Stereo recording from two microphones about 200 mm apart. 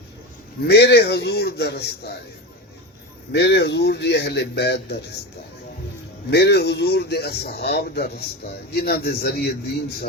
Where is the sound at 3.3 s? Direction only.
55° left (ahead or behind).